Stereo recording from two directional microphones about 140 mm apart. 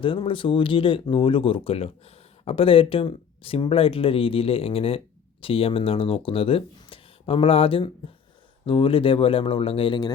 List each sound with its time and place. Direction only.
0.0 s speech: 40° left (ahead or behind)